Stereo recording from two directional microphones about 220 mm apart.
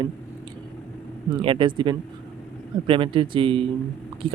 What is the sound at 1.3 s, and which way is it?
Speech, 20° right (ahead or behind).